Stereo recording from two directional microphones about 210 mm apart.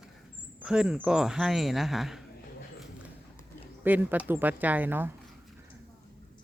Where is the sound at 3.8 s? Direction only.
10° right (ahead or behind).